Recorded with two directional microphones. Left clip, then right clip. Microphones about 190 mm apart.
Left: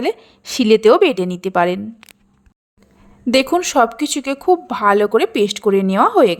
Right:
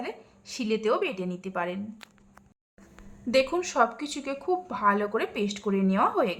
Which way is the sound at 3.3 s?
40° left (ahead or behind).